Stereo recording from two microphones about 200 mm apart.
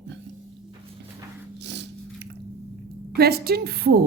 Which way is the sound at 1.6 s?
60° right (ahead or behind).